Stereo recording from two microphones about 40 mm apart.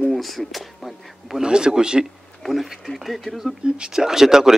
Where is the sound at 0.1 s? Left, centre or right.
Centre.